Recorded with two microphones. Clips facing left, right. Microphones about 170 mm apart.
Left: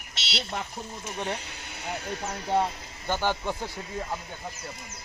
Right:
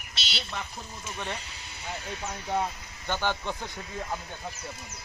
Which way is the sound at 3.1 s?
10° left (ahead or behind).